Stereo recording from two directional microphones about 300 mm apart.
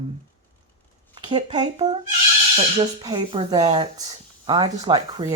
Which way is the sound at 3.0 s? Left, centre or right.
Centre.